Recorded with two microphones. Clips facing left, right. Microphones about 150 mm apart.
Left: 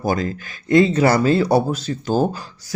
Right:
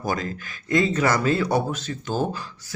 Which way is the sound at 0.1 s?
35° left (ahead or behind).